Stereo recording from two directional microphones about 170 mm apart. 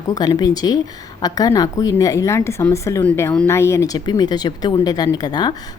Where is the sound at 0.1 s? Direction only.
25° left (ahead or behind).